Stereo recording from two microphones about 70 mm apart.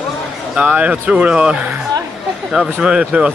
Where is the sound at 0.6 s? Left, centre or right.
Centre.